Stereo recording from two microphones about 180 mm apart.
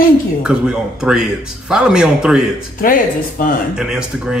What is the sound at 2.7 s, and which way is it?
Speech, 50° left (ahead or behind).